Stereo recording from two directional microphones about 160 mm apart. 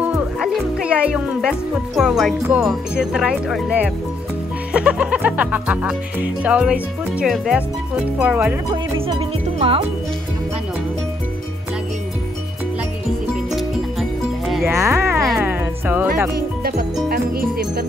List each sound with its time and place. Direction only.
0.0 s music: 5° right (ahead or behind)
2.0 s speech: centre (ahead or behind)
8.9 s speech: 35° right (ahead or behind)
13.3 s music: centre (ahead or behind)
14.7 s speech: 15° right (ahead or behind)
15.4 s music: 10° right (ahead or behind)
16.3 s speech: 70° right (ahead or behind)